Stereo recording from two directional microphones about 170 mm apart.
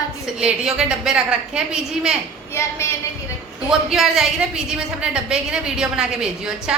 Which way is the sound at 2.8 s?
15° left (ahead or behind).